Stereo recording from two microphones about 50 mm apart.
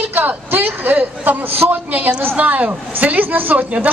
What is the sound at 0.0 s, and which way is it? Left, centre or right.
A man's voice, right.